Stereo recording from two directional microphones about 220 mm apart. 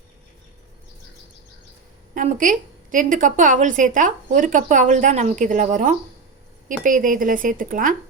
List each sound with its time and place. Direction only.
2.1 s a woman's voice: 35° right (ahead or behind)